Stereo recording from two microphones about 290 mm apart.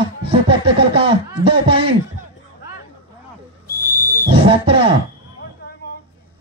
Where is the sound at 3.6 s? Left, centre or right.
Left.